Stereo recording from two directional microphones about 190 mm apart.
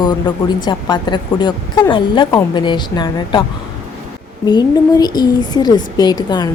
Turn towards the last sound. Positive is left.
turn(degrees=20)  # may be behind; listen again after turning